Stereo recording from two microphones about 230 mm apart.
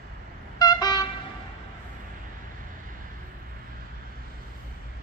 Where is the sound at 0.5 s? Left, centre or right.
Centre.